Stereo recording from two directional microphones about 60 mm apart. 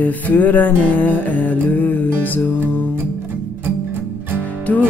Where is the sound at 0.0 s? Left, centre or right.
Left.